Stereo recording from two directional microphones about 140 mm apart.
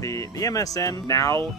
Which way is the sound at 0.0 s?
25° left (ahead or behind).